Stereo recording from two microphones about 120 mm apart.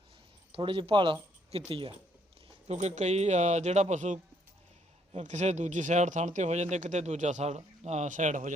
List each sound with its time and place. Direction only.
0.5 s speech: 45° right (ahead or behind)
2.6 s speech: 75° right (ahead or behind)
5.1 s speech: 75° right (ahead or behind)